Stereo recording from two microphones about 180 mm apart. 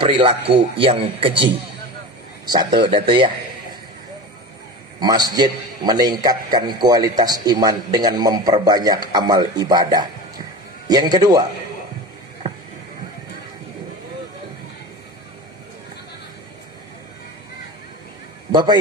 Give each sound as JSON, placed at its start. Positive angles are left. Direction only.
{"t": 0.0, "sound": "a man's voice", "side_deg": -30}
{"t": 5.0, "sound": "a man's voice", "side_deg": -20}
{"t": 18.5, "sound": "a man's voice", "side_deg": -25}